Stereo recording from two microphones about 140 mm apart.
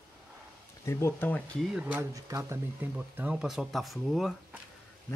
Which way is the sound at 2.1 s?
25° right (ahead or behind).